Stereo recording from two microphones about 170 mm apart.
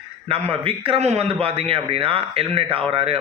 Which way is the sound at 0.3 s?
35° right (ahead or behind).